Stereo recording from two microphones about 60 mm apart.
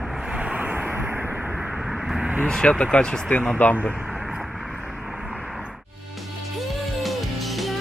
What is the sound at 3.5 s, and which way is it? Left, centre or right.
Speech, left.